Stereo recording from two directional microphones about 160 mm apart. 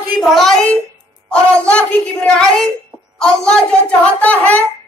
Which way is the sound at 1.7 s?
5° left (ahead or behind).